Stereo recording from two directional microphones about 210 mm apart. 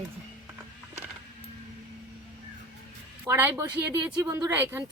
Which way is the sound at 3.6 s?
20° right (ahead or behind).